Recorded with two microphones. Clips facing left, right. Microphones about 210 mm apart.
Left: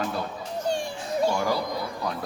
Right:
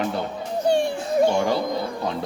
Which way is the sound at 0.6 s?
60° right (ahead or behind).